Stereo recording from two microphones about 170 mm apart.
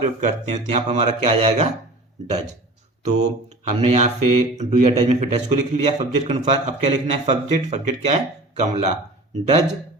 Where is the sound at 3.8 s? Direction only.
45° right (ahead or behind).